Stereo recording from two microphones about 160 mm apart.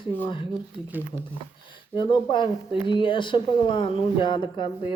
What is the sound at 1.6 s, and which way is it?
Speech, 30° left (ahead or behind).